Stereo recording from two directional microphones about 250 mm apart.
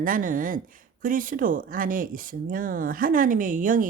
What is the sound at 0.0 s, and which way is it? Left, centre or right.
Speech, right.